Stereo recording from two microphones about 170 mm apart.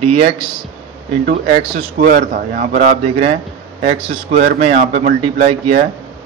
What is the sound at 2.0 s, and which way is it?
Speech, 55° right (ahead or behind).